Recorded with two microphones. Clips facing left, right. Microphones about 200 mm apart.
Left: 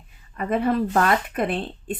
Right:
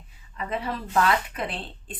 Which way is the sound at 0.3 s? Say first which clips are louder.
Left 9 dB; 55° left (ahead or behind).